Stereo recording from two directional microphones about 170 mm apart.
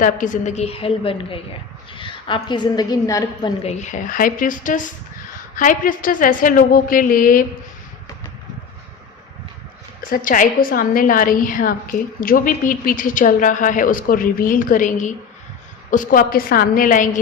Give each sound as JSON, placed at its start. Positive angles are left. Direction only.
{"t": 0.0, "sound": "a woman's voice", "side_deg": 50}
{"t": 3.6, "sound": "a woman's voice", "side_deg": 40}
{"t": 10.1, "sound": "a woman's voice", "side_deg": 50}